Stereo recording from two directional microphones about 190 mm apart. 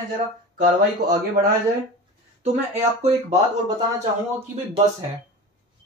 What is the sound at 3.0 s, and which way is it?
Speech, 35° right (ahead or behind).